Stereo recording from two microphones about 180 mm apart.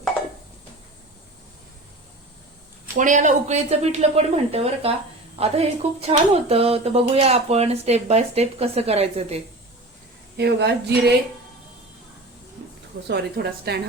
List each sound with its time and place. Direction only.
3.0 s speech: 45° right (ahead or behind)
10.3 s a woman's voice: 70° right (ahead or behind)
13.1 s a woman's voice: 65° right (ahead or behind)